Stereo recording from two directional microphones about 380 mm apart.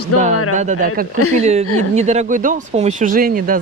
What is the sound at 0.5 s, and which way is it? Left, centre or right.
Speech, centre.